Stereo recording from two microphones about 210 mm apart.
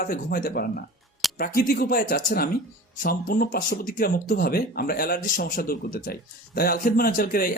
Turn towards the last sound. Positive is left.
turn(degrees=45)  # may be behind; listen again after turning